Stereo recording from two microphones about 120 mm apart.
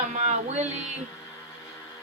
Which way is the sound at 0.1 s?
80° right.